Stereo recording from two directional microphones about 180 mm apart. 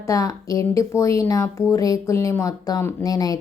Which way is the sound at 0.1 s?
20° left (ahead or behind).